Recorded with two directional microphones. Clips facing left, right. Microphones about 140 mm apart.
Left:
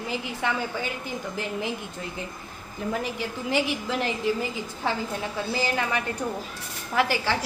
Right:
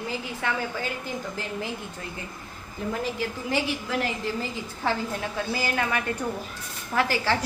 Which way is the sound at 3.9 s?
20° left (ahead or behind).